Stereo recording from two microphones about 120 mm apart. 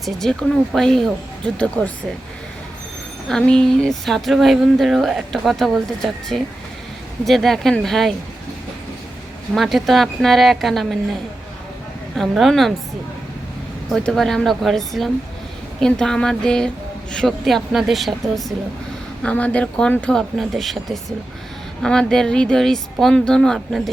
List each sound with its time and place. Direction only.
0.0 s speech: 5° left (ahead or behind)
3.2 s speech: 5° left (ahead or behind)
9.6 s speech: centre (ahead or behind)
12.1 s speech: centre (ahead or behind)
13.9 s speech: 5° left (ahead or behind)
19.2 s speech: 10° left (ahead or behind)